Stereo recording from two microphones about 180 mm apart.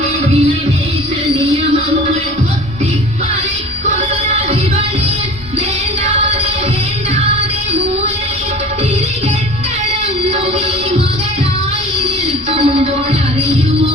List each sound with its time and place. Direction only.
3.9 s music: 35° right (ahead or behind)
12.5 s music: 35° right (ahead or behind)